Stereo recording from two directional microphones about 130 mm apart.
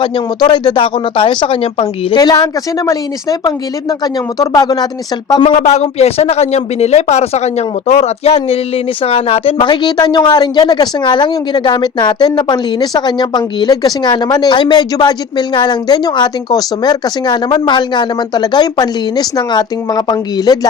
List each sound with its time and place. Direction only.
0.4 s speech: 35° left (ahead or behind)
2.1 s a woman's voice: 30° left (ahead or behind)
5.4 s speech: 65° left (ahead or behind); by 20.7 s 30° left (ahead or behind)